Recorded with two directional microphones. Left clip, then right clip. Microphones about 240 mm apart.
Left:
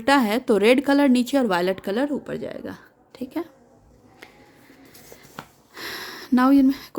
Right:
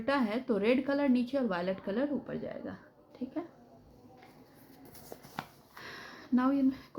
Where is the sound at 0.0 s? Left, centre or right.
Left.